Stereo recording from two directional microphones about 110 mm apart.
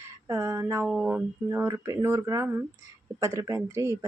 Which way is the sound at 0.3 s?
25° right (ahead or behind).